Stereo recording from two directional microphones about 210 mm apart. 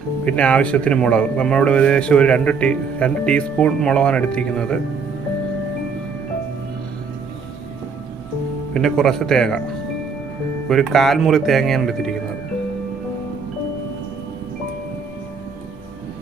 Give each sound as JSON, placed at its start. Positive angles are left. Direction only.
{"t": 0.3, "sound": "speech", "side_deg": 5}
{"t": 8.7, "sound": "speech", "side_deg": 0}
{"t": 10.7, "sound": "speech", "side_deg": 0}